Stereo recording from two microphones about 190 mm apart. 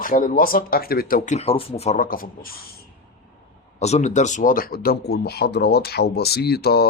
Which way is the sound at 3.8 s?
35° left (ahead or behind).